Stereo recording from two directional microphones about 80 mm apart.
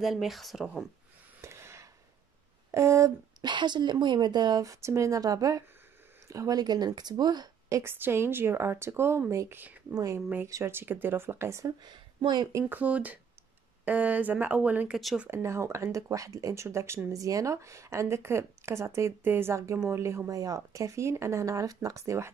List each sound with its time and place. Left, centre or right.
0.0 s speech: centre
1.4 s a sound: right
2.7 s speech: right
3.3 s a woman's voice: right
7.7 s speech: right
9.6 s speech: right
9.9 s speech: right
10.5 s speech: right
11.6 s speech: right
12.6 s speech: centre
15.2 s speech: right